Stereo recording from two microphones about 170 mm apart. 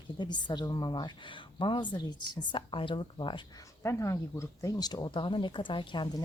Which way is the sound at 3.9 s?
15° left (ahead or behind).